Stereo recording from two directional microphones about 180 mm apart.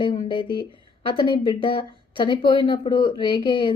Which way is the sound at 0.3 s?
25° left (ahead or behind).